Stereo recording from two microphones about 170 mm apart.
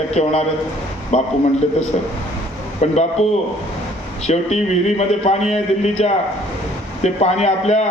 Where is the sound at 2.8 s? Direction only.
40° left (ahead or behind).